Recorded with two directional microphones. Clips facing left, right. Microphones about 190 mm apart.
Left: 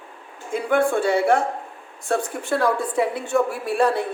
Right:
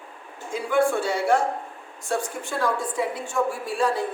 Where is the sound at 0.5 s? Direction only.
55° left (ahead or behind).